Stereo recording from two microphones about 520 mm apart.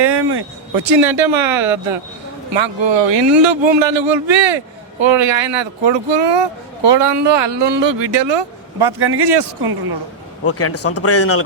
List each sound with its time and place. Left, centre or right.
0.0 s a sound: right
0.9 s a man's voice: right
1.6 s speech: centre
2.5 s a man's voice: right
10.4 s speech: left